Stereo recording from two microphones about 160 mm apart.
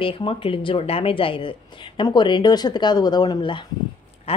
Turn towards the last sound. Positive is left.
turn(degrees=35)  # may be behind; listen again after turning